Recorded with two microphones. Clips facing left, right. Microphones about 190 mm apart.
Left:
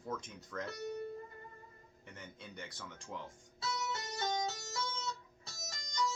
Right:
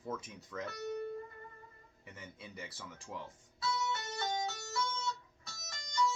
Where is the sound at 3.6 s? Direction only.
25° left (ahead or behind).